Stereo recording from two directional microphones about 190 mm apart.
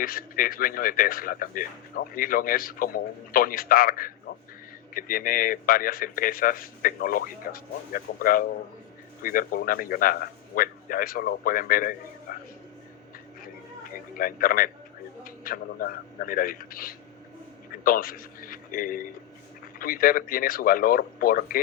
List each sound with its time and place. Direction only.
0.0 s speech: 50° left (ahead or behind)
14.1 s a man's voice: 50° left (ahead or behind)